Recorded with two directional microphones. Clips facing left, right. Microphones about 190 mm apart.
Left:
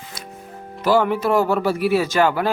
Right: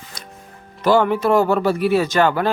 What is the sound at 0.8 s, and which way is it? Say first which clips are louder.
Speech: right 2 dB; 5° left (ahead or behind).